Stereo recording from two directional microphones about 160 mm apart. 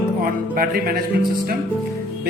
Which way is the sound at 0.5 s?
65° right (ahead or behind).